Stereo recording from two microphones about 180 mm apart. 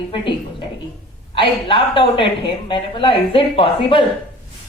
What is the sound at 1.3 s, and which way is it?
A woman's voice, 30° left (ahead or behind).